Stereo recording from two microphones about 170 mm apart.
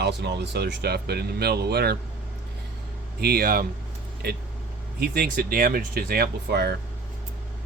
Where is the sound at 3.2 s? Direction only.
65° right (ahead or behind).